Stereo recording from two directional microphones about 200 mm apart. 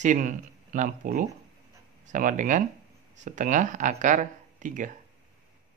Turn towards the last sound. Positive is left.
turn(degrees=-40)  # may be behind; listen again after turning